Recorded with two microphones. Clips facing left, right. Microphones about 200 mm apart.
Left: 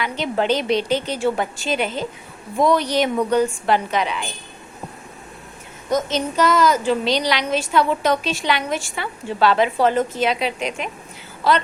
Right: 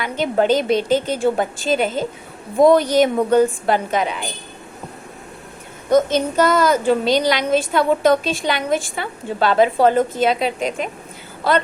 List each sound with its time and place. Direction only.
0.0 s a woman's voice: 45° right (ahead or behind)
5.9 s a woman's voice: 55° right (ahead or behind)